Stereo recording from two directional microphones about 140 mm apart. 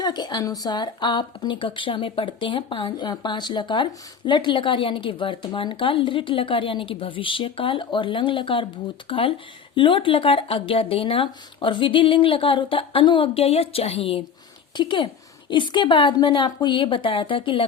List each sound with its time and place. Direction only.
0.0 s speech: 30° left (ahead or behind)